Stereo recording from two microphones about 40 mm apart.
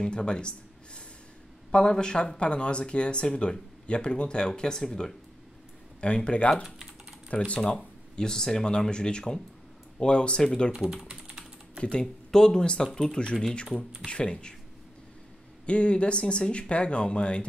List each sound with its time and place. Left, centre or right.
0.0 s speech: left
5.9 s speech: left
6.6 s typing: centre
7.2 s speech: left
8.2 s speech: centre
11.2 s typing: right
11.8 s speech: left
12.3 s speech: centre
14.0 s speech: left
15.6 s speech: left